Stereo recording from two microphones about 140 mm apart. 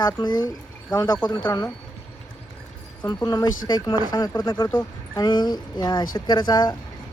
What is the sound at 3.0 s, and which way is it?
Speech, 30° left (ahead or behind).